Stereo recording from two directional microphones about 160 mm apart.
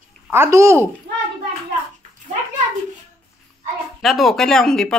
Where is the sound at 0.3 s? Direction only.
15° right (ahead or behind).